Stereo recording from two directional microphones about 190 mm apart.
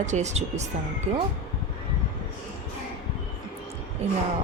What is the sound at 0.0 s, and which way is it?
Speech, 40° right (ahead or behind).